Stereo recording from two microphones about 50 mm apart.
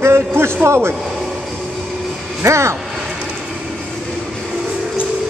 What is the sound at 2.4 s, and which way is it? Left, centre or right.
Speech, right.